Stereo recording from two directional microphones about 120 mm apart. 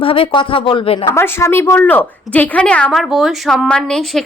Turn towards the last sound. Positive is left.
turn(degrees=5)  # may be behind; listen again after turning